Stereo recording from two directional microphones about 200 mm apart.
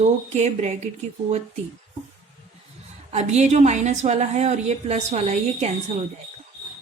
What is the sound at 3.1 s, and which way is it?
A woman's voice, 35° right (ahead or behind).